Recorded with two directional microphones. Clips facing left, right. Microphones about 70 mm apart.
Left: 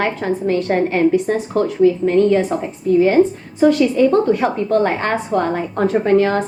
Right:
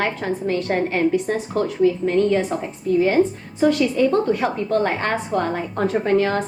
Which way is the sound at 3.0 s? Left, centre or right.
Left.